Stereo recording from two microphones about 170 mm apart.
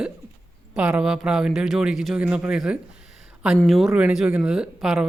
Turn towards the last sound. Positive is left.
turn(degrees=-5)  # may be behind; listen again after turning